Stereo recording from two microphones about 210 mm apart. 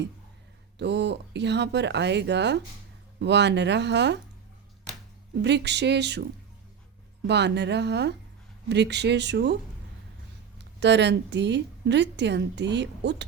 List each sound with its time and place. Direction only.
0.8 s a woman's voice: 55° right (ahead or behind)
5.3 s a woman's voice: 55° right (ahead or behind)
7.3 s a woman's voice: 55° right (ahead or behind)
10.8 s a woman's voice: 55° right (ahead or behind)